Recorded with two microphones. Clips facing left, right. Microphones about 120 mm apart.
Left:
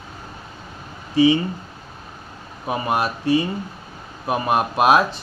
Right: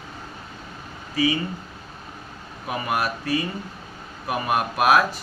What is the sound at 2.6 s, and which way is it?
Speech, 25° left (ahead or behind).